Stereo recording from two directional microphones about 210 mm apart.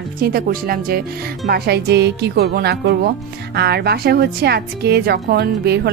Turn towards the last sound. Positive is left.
turn(degrees=-50)  # may be behind; listen again after turning